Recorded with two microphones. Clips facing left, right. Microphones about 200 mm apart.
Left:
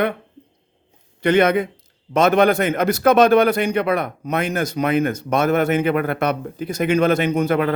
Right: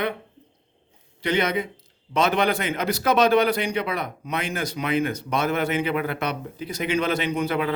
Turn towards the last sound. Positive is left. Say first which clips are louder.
# left 6 dB
turn(degrees=50)  # may be behind; listen again after turning